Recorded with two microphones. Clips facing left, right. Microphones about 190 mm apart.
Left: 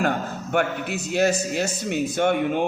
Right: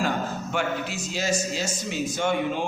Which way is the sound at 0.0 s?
60° left (ahead or behind).